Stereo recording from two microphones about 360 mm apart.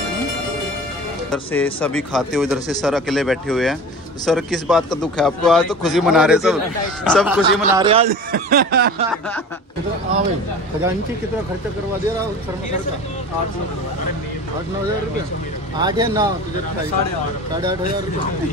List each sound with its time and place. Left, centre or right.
1.3 s speech: centre
7.8 s speech: centre
8.1 s a sound: right
15.8 s speech: centre